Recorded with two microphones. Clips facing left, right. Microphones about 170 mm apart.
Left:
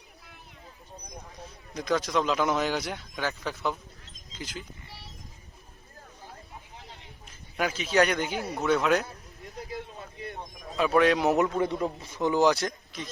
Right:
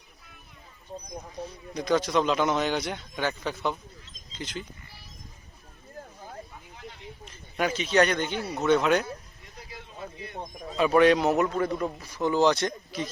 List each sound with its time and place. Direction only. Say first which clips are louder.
1.7 s speech: right 2 dB; centre (ahead or behind)
7.5 s speech: right 2 dB; 5° left (ahead or behind)
10.8 s speech: right 3 dB; centre (ahead or behind)
11.3 s a man's voice: even; 15° left (ahead or behind)
12.5 s speech: right 4 dB; centre (ahead or behind)